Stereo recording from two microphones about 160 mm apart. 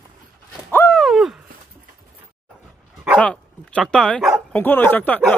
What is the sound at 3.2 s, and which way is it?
Speech, 5° left (ahead or behind).